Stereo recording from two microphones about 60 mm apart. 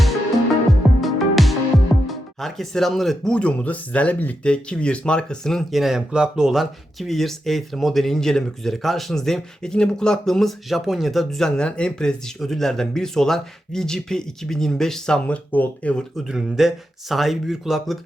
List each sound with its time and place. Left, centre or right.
0.7 s music: centre
2.0 s speech: centre
3.3 s speech: left
12.4 s speech: centre
15.3 s speech: left
16.3 s speech: centre